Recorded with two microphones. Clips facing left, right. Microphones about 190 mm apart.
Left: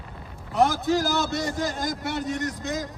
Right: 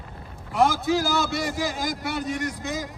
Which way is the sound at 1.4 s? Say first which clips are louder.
Even; 5° right (ahead or behind).